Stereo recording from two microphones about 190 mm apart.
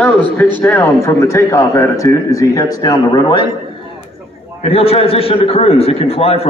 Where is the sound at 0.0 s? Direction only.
5° left (ahead or behind).